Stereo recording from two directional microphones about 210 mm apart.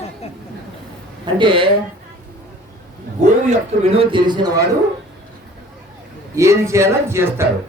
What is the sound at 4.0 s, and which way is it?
Speech, 25° right (ahead or behind).